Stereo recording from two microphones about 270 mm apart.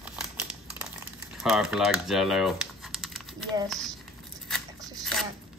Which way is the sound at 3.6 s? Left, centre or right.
Centre.